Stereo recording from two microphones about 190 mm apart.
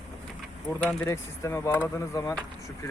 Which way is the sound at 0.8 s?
5° left (ahead or behind).